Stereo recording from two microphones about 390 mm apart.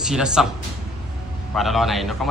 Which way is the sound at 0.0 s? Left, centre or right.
Centre.